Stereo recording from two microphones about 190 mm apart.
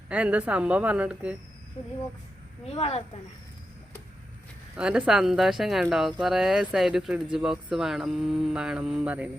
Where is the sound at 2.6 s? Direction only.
30° left (ahead or behind).